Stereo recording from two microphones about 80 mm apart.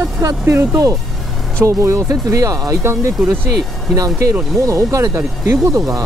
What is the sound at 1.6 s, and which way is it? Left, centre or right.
Speech, right.